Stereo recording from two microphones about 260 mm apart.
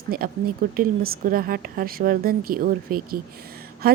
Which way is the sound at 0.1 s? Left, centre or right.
Right.